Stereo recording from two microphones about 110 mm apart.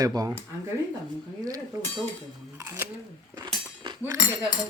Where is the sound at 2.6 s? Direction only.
25° right (ahead or behind).